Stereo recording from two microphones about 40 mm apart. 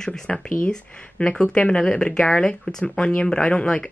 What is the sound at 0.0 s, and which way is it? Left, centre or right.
Speech, centre.